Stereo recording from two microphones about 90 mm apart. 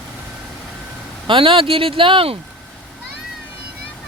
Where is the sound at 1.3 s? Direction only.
80° right.